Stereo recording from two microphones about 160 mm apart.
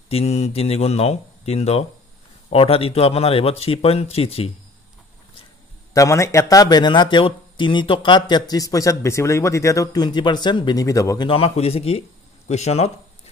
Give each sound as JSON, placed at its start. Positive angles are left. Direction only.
{"t": 0.1, "sound": "speech", "side_deg": 40}
{"t": 5.9, "sound": "speech", "side_deg": 20}
{"t": 11.2, "sound": "speech", "side_deg": 35}